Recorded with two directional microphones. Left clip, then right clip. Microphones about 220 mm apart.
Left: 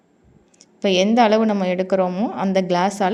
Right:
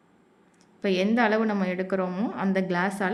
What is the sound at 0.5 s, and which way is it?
A woman's voice, 20° left (ahead or behind).